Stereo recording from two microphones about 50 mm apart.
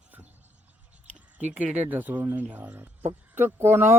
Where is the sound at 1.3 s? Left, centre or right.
Right.